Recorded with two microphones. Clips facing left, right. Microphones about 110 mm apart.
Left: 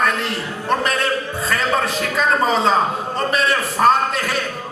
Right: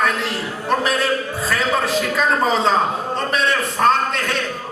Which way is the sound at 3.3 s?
Centre (ahead or behind).